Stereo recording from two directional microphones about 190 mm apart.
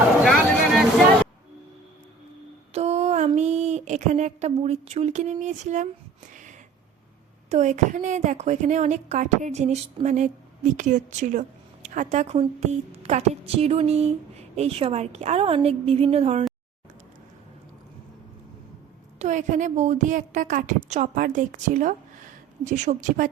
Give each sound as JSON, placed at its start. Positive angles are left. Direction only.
{"t": 0.3, "sound": "vehicle", "side_deg": 0}
{"t": 2.7, "sound": "a sound", "side_deg": -35}
{"t": 7.5, "sound": "a woman's voice", "side_deg": -40}
{"t": 19.2, "sound": "a woman's voice", "side_deg": -40}